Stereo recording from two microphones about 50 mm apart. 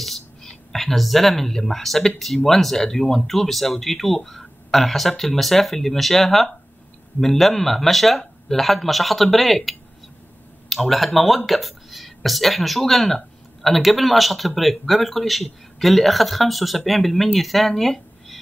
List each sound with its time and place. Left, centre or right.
0.0 s speech: centre